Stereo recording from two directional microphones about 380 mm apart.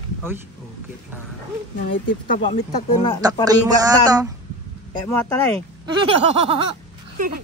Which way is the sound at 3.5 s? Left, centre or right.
Centre.